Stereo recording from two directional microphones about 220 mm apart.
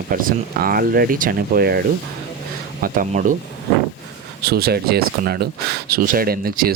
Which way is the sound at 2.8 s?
40° right (ahead or behind).